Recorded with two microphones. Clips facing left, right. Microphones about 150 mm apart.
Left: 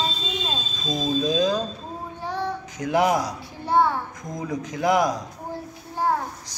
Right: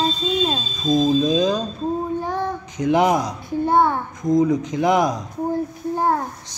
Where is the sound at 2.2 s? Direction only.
50° right (ahead or behind).